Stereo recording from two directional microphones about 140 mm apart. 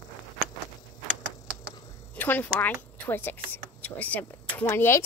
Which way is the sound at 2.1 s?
10° left (ahead or behind).